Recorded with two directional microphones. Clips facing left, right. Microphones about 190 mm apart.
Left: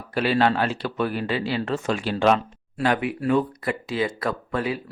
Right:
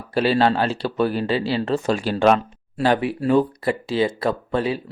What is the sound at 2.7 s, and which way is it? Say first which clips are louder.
Speech: right 3 dB; 30° right (ahead or behind).